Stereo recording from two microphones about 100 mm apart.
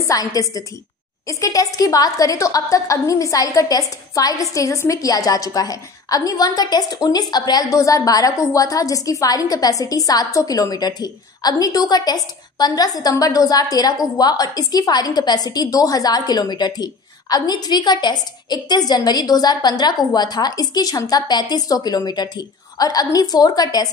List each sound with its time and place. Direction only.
0.0 s a woman's voice: 35° left (ahead or behind)